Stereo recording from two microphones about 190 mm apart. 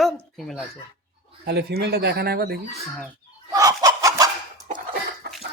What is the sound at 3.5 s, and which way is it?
Chicken, 20° right (ahead or behind).